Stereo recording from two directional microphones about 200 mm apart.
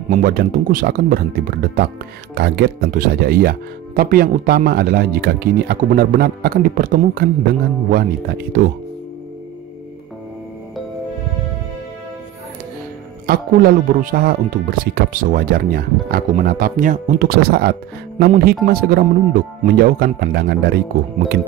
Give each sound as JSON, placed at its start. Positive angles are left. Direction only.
{"t": 0.1, "sound": "speech", "side_deg": -45}
{"t": 13.3, "sound": "speech", "side_deg": -45}